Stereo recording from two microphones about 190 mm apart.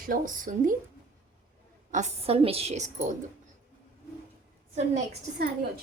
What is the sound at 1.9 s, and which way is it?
A woman's voice, 40° right (ahead or behind).